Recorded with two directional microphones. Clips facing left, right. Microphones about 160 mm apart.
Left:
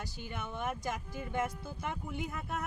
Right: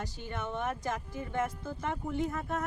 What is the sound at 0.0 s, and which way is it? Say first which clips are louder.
Speech: right 4 dB; 10° left (ahead or behind).